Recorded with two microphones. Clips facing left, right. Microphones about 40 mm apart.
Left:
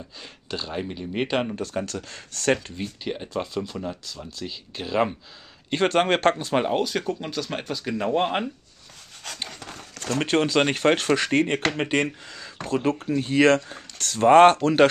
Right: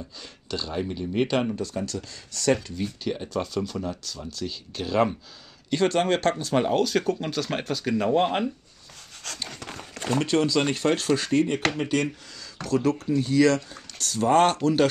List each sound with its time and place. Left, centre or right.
0.2 s speech: left
1.6 s speech: left; by 5.1 s centre
5.7 s speech: left
6.5 s speech: centre
7.2 s speech: centre
10.2 s speech: left